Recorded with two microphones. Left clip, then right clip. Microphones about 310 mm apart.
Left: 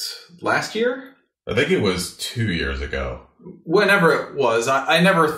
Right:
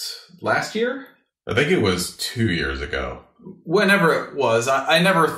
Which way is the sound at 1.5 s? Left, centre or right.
Right.